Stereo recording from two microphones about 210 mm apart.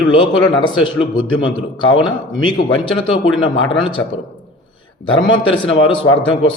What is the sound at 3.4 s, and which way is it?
Speech, 20° left (ahead or behind).